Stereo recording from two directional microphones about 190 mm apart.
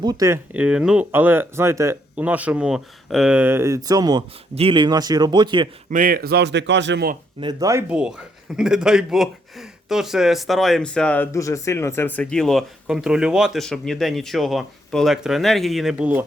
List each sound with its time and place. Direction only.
0.0 s speech: 20° right (ahead or behind)
5.9 s a man's voice: 45° right (ahead or behind); by 7.1 s 70° right (ahead or behind)
7.3 s a man's voice: 20° right (ahead or behind)